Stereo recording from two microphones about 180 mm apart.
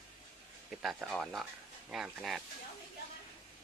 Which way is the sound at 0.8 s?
5° right (ahead or behind).